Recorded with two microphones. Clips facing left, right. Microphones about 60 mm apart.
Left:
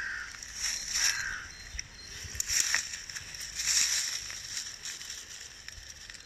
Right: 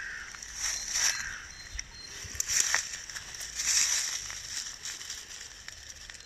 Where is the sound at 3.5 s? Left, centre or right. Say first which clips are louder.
Even; left.